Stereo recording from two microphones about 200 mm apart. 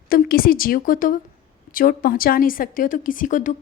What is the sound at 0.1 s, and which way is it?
A woman's voice, 45° left (ahead or behind).